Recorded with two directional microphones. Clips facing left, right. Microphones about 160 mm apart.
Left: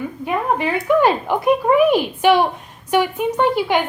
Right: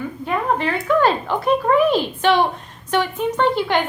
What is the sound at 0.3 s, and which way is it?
A woman's voice, 15° left (ahead or behind).